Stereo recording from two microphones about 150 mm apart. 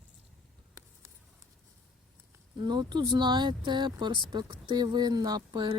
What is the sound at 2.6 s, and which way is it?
Speech, 30° right (ahead or behind).